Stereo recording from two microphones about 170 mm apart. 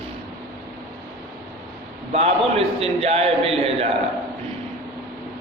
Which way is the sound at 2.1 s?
35° right (ahead or behind).